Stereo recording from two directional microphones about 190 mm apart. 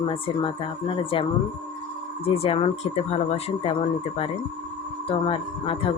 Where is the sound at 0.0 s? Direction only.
25° left (ahead or behind).